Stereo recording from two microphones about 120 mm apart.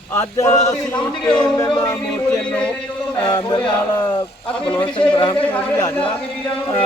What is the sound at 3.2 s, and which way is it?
Music, 35° left (ahead or behind).